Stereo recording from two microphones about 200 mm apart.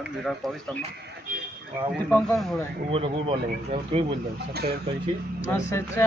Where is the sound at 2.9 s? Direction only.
25° right (ahead or behind).